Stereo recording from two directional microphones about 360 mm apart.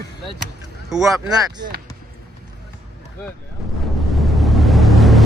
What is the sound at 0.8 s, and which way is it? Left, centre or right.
Speech, centre.